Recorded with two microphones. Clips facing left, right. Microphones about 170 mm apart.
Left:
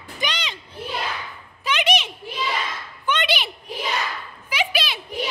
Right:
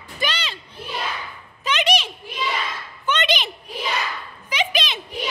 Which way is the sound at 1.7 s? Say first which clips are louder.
Right 1 dB; 15° left (ahead or behind).